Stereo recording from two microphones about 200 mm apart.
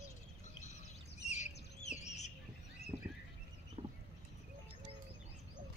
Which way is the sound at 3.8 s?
35° right (ahead or behind).